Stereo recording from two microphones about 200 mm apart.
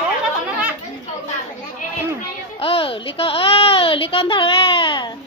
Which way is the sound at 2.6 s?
25° left (ahead or behind).